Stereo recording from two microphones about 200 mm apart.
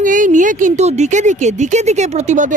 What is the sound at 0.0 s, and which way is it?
A woman's voice, 40° right (ahead or behind).